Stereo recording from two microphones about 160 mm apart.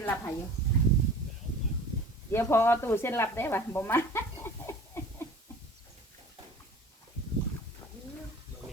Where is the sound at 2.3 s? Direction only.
15° left (ahead or behind).